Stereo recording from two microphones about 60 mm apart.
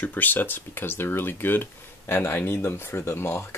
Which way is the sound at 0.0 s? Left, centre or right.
Left.